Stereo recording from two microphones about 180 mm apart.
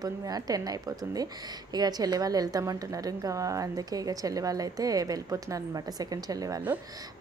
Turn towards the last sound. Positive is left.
turn(degrees=-20)  # may be behind; listen again after turning